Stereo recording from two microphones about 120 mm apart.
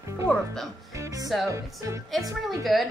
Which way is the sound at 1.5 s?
25° right (ahead or behind).